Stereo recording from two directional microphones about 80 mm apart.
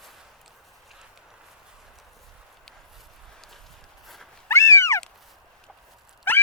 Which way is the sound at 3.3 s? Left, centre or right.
Centre.